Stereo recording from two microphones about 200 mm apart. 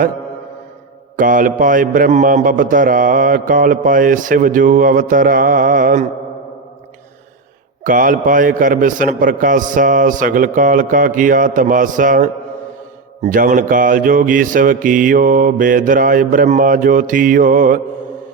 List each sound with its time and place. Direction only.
1.1 s a man's voice: 40° right (ahead or behind)
7.9 s a man's voice: 40° right (ahead or behind)
13.2 s mantra: 40° right (ahead or behind)